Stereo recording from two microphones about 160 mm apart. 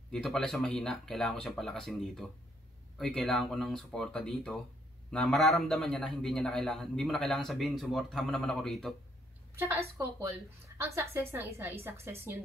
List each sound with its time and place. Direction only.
0.1 s a man's voice: centre (ahead or behind)
9.6 s a woman's voice: 15° right (ahead or behind)